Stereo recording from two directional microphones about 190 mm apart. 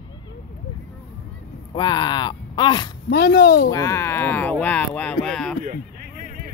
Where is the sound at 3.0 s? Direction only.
55° left (ahead or behind).